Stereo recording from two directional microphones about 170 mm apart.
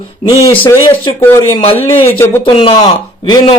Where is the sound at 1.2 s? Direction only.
15° left (ahead or behind).